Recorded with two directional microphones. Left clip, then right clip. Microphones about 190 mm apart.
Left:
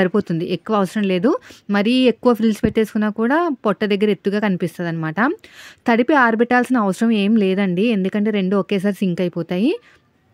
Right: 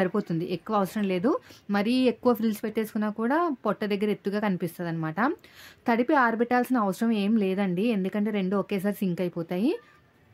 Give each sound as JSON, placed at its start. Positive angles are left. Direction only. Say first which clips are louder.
{"t": 0.0, "sound": "speech", "louder": "left 9 dB", "side_deg": 40}